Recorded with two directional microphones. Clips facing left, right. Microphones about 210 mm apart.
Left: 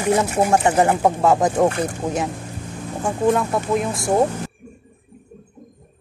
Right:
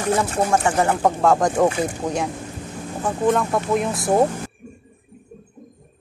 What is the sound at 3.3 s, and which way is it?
Speech, centre (ahead or behind).